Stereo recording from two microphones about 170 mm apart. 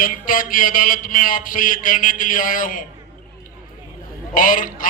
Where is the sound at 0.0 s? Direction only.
55° left (ahead or behind).